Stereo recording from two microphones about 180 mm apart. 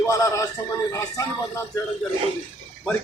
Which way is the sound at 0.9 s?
15° left (ahead or behind).